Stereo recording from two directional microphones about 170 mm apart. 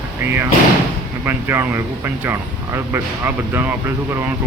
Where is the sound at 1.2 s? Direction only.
15° right (ahead or behind).